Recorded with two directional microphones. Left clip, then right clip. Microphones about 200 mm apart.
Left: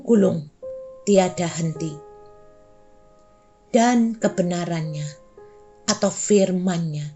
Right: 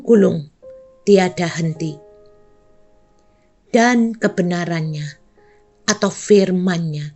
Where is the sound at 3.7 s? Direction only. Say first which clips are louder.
Right 4 dB; 50° right (ahead or behind).